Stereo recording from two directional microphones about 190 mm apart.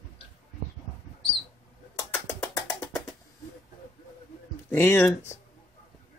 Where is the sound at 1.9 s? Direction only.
15° left (ahead or behind).